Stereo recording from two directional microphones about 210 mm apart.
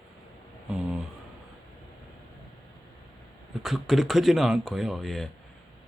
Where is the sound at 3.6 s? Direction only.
Centre (ahead or behind).